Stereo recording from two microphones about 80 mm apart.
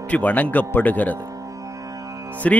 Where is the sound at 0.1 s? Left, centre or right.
Left.